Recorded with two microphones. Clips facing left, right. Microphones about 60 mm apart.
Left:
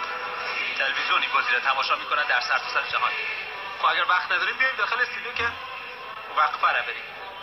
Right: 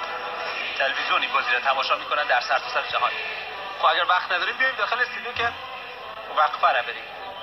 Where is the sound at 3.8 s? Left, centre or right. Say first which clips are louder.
Right 2 dB; left.